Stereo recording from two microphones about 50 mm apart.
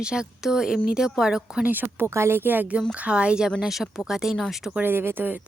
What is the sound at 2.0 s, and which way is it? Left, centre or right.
Speech, right.